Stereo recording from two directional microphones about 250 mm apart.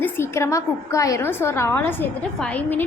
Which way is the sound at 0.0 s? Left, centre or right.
Centre.